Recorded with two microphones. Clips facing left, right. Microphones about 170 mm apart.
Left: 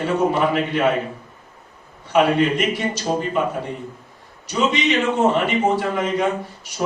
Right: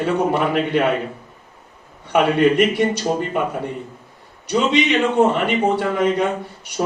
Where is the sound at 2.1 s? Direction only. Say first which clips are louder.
Right 2 dB; 60° right (ahead or behind).